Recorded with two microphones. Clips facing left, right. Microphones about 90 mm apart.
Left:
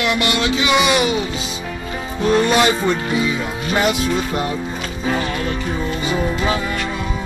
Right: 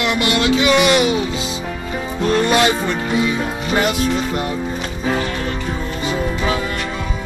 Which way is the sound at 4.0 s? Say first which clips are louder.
Right 1 dB; 5° left (ahead or behind).